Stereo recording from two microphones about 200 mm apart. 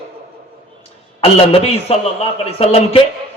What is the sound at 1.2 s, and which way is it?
A man's voice, 30° left (ahead or behind).